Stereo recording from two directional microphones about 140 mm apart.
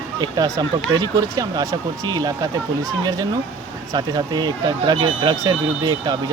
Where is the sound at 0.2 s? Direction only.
25° right (ahead or behind).